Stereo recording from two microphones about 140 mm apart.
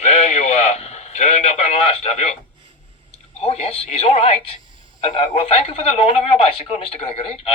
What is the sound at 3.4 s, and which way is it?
Speech, 45° left (ahead or behind).